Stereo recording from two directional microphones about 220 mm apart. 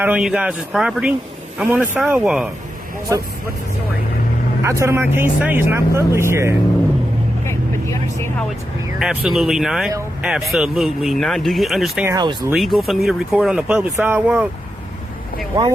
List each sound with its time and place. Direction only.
0.0 s speech: 5° right (ahead or behind)
4.6 s speech: 10° right (ahead or behind)
7.4 s vehicle: 10° left (ahead or behind)
9.0 s speech: centre (ahead or behind)
12.1 s speech: 20° right (ahead or behind)
12.5 s speech: centre (ahead or behind)